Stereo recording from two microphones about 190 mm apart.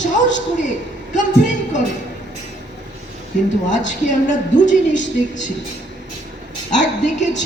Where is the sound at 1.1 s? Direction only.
40° left (ahead or behind).